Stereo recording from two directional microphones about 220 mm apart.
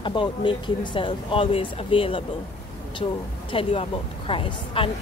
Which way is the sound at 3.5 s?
25° left (ahead or behind).